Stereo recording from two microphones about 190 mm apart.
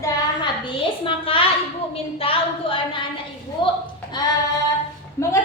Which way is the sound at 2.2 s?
30° left (ahead or behind).